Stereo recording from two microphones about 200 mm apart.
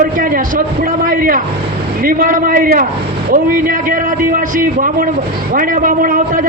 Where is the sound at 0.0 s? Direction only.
45° right (ahead or behind).